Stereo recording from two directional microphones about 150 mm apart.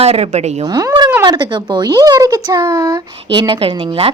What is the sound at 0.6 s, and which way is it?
A woman's voice, 25° right (ahead or behind).